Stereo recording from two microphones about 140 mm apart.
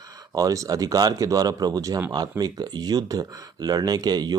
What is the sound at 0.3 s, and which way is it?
Speech, 25° right (ahead or behind).